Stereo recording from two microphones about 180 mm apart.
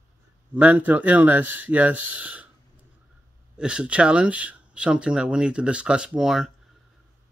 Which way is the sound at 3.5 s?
5° right (ahead or behind).